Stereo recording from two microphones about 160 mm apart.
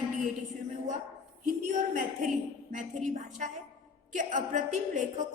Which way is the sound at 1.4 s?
55° right (ahead or behind).